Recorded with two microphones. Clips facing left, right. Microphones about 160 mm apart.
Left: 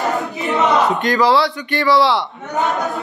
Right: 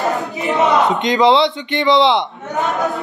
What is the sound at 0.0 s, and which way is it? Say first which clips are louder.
Battle cry: right 1 dB; centre (ahead or behind).